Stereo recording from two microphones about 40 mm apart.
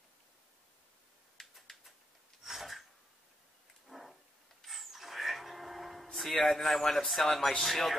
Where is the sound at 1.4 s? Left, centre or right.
Centre.